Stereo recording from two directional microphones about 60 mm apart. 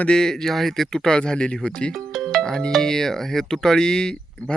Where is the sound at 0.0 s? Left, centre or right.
Centre.